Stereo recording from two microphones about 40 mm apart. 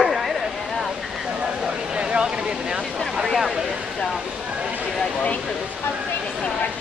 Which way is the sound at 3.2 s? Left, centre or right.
Centre.